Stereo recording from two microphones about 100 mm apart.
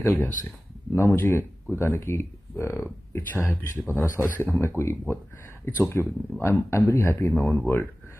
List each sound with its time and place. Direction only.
0.0 s speech: 25° left (ahead or behind)